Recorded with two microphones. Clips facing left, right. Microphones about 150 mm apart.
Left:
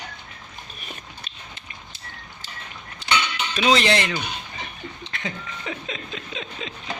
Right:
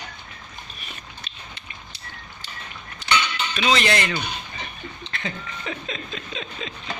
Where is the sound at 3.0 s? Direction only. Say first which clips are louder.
Right 1 dB; 30° left (ahead or behind).